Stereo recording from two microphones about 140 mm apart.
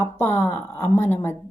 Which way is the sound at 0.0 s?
20° left (ahead or behind).